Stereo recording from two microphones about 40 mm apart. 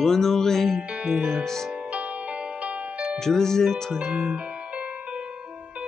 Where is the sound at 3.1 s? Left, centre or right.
Centre.